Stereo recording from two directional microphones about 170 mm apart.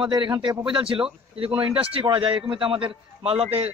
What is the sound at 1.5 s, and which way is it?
Speech, 10° right (ahead or behind).